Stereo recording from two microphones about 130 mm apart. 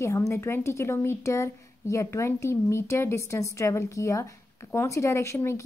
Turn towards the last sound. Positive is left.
turn(degrees=20)  # may be behind; listen again after turning